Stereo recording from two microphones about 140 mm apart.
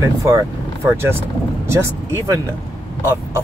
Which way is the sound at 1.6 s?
20° right (ahead or behind).